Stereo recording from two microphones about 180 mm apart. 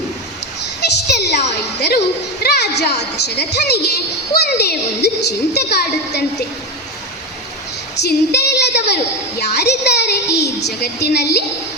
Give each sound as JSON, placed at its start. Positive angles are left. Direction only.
{"t": 0.6, "sound": "a sound", "side_deg": 65}
{"t": 2.4, "sound": "music", "side_deg": 65}
{"t": 3.2, "sound": "a child's voice", "side_deg": 65}
{"t": 8.0, "sound": "a child's voice", "side_deg": 65}